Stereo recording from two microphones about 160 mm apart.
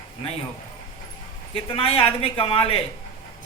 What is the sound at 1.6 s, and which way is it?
A woman's voice, 35° left (ahead or behind).